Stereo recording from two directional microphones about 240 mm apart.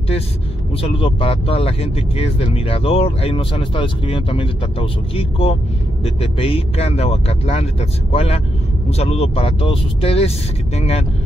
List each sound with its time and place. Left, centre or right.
0.7 s speech: left